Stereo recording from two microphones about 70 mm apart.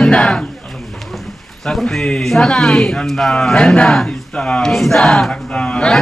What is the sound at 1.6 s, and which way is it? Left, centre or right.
Speech, centre.